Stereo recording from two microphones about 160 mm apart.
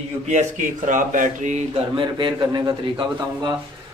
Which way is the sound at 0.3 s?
50° right (ahead or behind).